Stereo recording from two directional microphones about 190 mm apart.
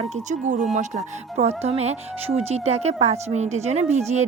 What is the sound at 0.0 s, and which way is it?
Speech, 40° right (ahead or behind).